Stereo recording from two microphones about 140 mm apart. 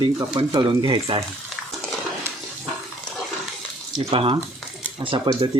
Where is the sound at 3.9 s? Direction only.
40° right (ahead or behind).